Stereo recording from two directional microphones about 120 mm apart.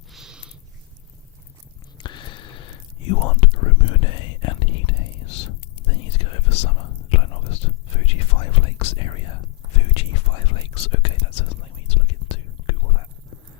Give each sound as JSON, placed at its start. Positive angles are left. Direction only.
{"t": 0.1, "sound": "cat", "side_deg": -5}
{"t": 2.0, "sound": "whispering", "side_deg": 40}